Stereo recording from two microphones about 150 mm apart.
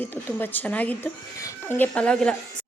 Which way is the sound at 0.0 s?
15° left (ahead or behind).